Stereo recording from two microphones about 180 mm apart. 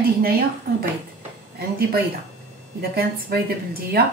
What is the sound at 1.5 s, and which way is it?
Speech, 60° right (ahead or behind).